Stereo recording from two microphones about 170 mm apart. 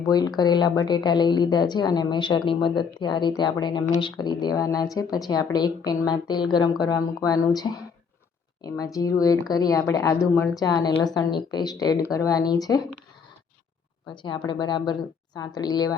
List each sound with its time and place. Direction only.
0.0 s a woman's voice: 25° left (ahead or behind)
8.8 s a woman's voice: 20° left (ahead or behind)
14.1 s a woman's voice: 30° left (ahead or behind)